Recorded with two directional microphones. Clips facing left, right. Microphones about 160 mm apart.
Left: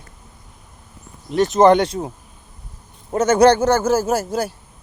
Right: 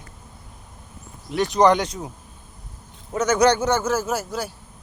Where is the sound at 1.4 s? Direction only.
45° left (ahead or behind).